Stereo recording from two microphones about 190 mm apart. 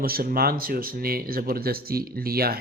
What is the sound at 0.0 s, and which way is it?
A man's voice, 50° right (ahead or behind).